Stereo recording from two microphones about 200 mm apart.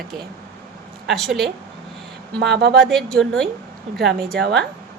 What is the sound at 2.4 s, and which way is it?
Speech, 55° right (ahead or behind).